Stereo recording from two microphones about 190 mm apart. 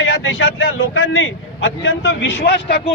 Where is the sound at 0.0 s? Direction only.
90° left; by 2.8 s 60° left (ahead or behind).